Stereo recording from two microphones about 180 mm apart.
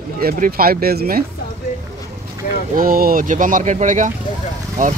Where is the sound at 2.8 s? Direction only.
50° right (ahead or behind).